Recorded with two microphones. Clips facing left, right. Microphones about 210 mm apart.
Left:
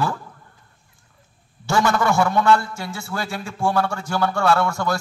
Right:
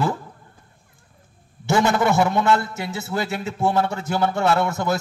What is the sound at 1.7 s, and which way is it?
A man's voice, 20° right (ahead or behind).